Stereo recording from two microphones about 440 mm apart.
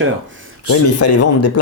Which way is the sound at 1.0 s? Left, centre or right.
Left.